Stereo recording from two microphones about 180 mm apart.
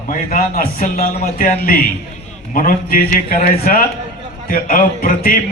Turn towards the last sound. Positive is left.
turn(degrees=50)  # may be behind; listen again after turning